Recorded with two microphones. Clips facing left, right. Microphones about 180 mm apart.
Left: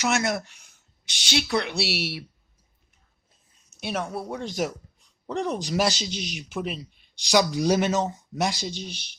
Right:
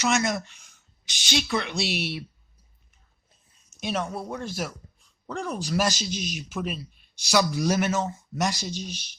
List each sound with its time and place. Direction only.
0.0 s speech: 10° left (ahead or behind)
3.8 s speech: 10° left (ahead or behind)
4.4 s speech: 20° left (ahead or behind)
8.8 s speech: 60° left (ahead or behind)